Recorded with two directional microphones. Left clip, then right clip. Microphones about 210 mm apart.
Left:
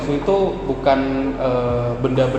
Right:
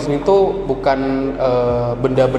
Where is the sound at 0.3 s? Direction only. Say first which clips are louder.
Right 5 dB; 30° right (ahead or behind).